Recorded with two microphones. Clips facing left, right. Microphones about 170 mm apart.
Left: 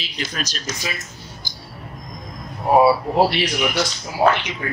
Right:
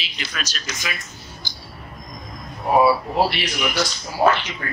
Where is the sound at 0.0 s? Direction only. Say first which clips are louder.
Left 4 dB; 40° left (ahead or behind).